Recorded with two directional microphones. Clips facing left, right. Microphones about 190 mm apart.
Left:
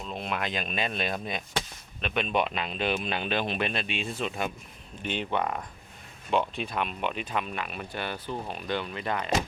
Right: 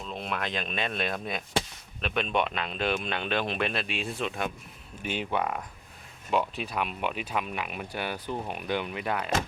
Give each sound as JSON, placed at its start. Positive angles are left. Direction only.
{"t": 0.0, "sound": "speech", "side_deg": 5}